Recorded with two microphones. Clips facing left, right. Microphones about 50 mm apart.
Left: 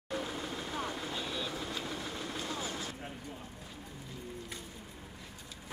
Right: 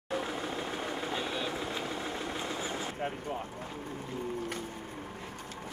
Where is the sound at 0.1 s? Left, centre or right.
Right.